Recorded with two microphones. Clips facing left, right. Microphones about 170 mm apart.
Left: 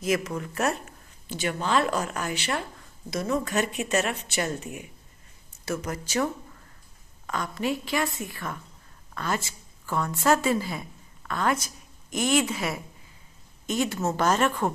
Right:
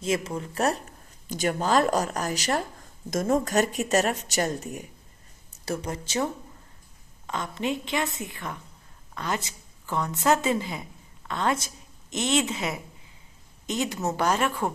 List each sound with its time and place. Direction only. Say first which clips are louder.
0.0 s a woman's voice: left 1 dB; 30° right (ahead or behind)
7.2 s a woman's voice: left 1 dB; 20° right (ahead or behind)